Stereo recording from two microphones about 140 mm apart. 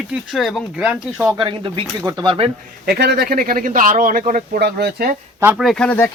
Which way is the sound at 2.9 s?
90° right.